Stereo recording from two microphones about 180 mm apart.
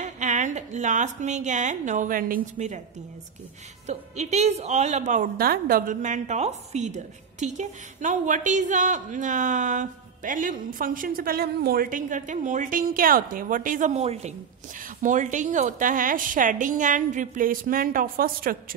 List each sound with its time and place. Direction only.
0.0 s a woman's voice: 40° right (ahead or behind)
3.8 s speech: 40° right (ahead or behind)
5.4 s a woman's voice: 55° right (ahead or behind)